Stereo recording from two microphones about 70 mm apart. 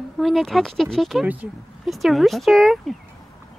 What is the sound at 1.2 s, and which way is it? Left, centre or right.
Speech, right.